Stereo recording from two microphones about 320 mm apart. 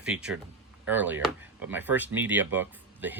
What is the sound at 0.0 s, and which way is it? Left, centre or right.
Speech, centre.